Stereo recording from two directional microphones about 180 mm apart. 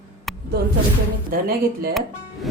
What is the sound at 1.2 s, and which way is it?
Speech, 55° right (ahead or behind).